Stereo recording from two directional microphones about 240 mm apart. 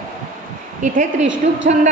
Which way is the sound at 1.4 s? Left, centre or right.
Right.